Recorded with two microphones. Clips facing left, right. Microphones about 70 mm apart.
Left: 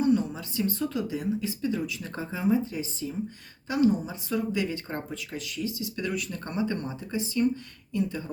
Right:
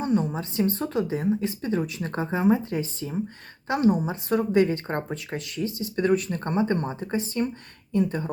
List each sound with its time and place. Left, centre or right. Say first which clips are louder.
0.0 s a woman's voice: even; right